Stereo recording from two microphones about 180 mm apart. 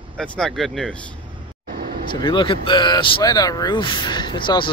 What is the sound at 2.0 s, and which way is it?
Speech, 25° left (ahead or behind).